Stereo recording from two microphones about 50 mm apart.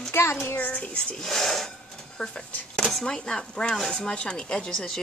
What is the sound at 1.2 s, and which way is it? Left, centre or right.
Speech, centre.